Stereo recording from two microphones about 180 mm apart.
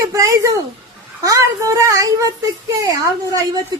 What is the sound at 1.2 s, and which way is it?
Speech, 15° right (ahead or behind).